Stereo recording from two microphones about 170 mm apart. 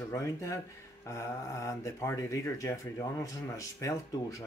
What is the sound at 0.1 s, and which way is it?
Speech, 15° left (ahead or behind).